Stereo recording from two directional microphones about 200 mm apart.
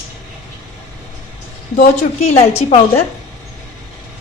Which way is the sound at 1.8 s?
35° left (ahead or behind).